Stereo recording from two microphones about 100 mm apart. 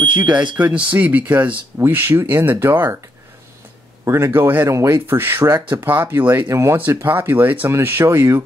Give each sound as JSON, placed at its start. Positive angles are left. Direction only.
{"t": 0.0, "sound": "speech", "side_deg": -45}
{"t": 0.6, "sound": "speech", "side_deg": -15}
{"t": 4.0, "sound": "speech", "side_deg": -30}